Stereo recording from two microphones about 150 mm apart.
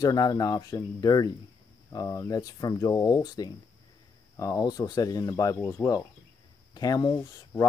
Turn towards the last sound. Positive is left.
turn(degrees=25)  # may be behind; listen again after turning